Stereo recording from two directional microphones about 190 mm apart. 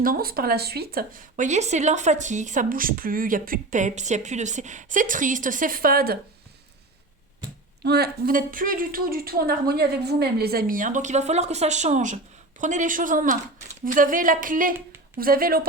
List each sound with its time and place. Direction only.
0.0 s speech: 50° right (ahead or behind)
7.9 s speech: 55° right (ahead or behind)